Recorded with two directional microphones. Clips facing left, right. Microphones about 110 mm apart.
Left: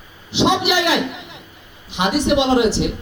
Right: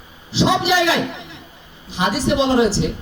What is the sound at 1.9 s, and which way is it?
Speech, 35° right (ahead or behind).